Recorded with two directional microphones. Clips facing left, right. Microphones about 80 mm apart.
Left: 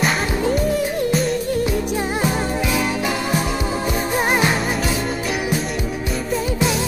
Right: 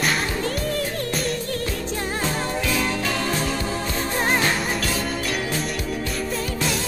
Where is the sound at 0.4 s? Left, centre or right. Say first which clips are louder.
Left 6 dB; centre.